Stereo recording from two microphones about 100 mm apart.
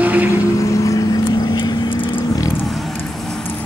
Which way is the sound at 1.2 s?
45° left (ahead or behind).